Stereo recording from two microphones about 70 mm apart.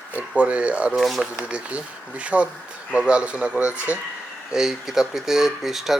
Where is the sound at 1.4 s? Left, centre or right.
Centre.